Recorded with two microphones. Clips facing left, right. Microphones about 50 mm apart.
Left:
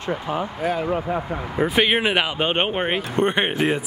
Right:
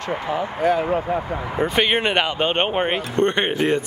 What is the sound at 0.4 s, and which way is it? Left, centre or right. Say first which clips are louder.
Speech: right 4 dB; centre.